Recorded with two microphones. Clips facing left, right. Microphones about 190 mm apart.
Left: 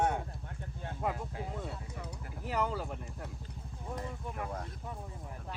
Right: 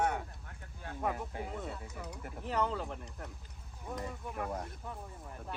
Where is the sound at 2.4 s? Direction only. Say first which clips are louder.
Even; 5° left (ahead or behind).